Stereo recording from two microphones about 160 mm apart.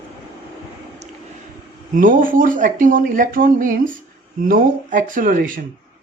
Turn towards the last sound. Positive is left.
turn(degrees=-60)  # may be behind; listen again after turning